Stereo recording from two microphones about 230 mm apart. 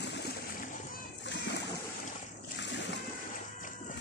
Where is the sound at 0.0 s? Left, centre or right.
Left.